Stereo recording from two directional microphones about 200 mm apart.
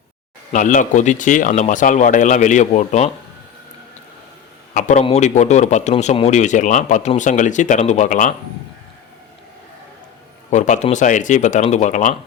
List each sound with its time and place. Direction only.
0.5 s speech: 40° left (ahead or behind)
4.7 s speech: 40° left (ahead or behind)
10.5 s speech: 35° left (ahead or behind)